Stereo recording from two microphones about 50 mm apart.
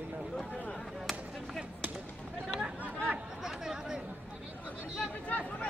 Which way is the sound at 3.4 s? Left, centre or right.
Centre.